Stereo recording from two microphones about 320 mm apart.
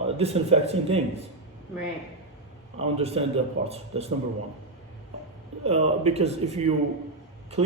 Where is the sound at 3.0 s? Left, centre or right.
Centre.